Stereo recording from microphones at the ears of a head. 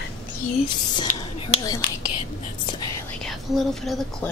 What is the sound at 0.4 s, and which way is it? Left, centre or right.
Speech, left.